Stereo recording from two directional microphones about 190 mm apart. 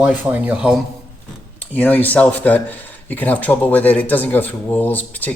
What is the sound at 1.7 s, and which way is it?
Speech, 10° left (ahead or behind).